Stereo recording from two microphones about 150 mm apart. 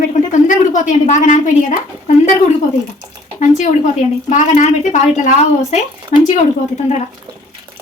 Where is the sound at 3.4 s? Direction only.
50° left (ahead or behind).